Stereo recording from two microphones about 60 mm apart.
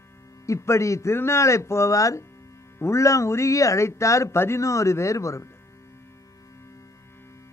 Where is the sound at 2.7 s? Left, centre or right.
Left.